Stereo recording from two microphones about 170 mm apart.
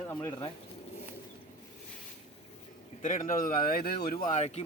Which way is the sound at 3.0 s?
50° left (ahead or behind).